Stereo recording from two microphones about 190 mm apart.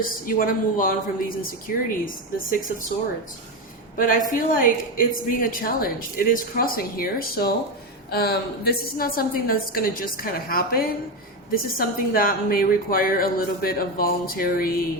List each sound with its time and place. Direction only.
0.0 s a woman's voice: 50° left (ahead or behind)
3.9 s a man's voice: 45° left (ahead or behind)